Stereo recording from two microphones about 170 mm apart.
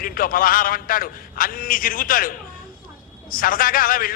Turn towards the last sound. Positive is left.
turn(degrees=55)  # may be behind; listen again after turning